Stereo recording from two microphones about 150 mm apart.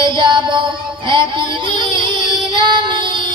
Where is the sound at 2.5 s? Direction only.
30° right (ahead or behind).